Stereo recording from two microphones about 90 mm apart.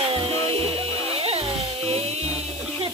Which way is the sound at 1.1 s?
90° right.